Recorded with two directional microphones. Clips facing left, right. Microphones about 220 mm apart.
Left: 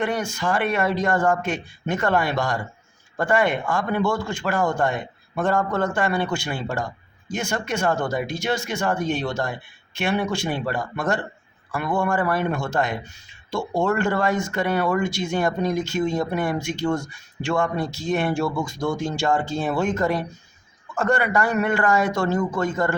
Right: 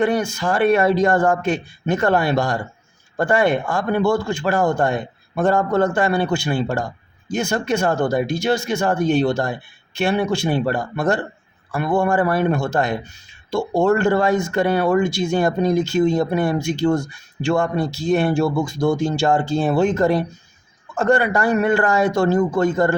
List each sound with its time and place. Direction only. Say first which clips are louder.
0.0 s a man's voice: right 5 dB; 35° right (ahead or behind)